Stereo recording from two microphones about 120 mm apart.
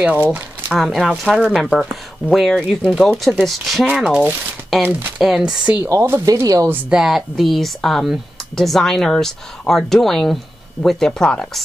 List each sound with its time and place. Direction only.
0.0 s speech: 15° right (ahead or behind)
0.7 s speech: centre (ahead or behind)
5.9 s speech: 20° right (ahead or behind)
6.7 s speech: 15° right (ahead or behind)
7.0 s speech: centre (ahead or behind)